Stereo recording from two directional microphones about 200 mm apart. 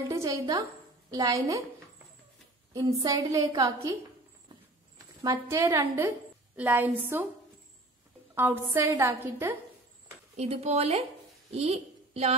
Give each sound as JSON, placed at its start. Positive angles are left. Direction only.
{"t": 0.1, "sound": "a woman's voice", "side_deg": -15}
{"t": 3.0, "sound": "a woman's voice", "side_deg": -15}
{"t": 5.2, "sound": "a woman's voice", "side_deg": -15}
{"t": 8.4, "sound": "a woman's voice", "side_deg": -10}
{"t": 10.3, "sound": "a woman's voice", "side_deg": -30}